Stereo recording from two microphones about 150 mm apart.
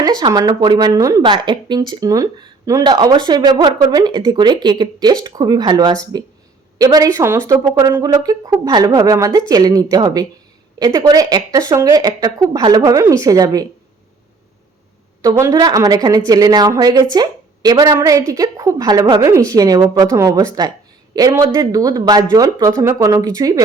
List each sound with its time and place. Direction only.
0.0 s speech: 25° right (ahead or behind)
15.2 s speech: 20° right (ahead or behind)